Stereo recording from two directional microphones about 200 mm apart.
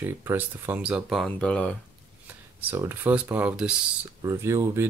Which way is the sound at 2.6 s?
10° right (ahead or behind).